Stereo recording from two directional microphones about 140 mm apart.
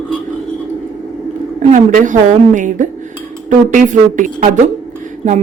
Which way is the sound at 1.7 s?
65° right (ahead or behind).